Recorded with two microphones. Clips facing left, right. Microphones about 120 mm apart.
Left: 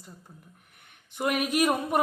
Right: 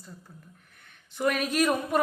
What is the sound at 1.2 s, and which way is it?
Speech, 15° left (ahead or behind).